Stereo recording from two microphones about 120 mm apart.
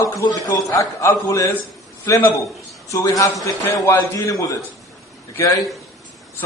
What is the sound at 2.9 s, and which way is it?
A man's voice, 25° left (ahead or behind).